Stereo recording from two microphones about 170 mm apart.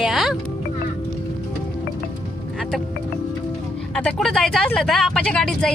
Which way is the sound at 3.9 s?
5° left (ahead or behind).